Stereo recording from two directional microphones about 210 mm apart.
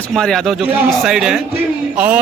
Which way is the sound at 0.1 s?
Centre (ahead or behind).